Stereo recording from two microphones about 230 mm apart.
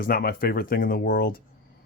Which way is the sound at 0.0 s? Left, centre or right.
Left.